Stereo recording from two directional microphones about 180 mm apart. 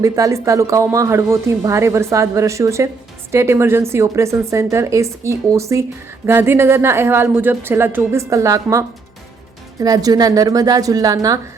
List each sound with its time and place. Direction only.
0.0 s a woman's voice: 20° right (ahead or behind)
9.8 s a woman's voice: 20° right (ahead or behind)